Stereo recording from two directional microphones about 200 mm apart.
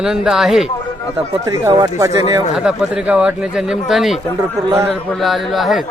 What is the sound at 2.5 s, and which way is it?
Speech, 5° right (ahead or behind).